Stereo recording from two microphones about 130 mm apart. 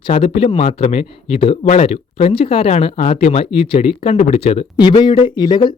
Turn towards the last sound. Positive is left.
turn(degrees=35)  # may be behind; listen again after turning